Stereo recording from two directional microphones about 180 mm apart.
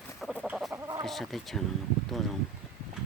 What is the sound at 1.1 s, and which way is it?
Speech, centre (ahead or behind).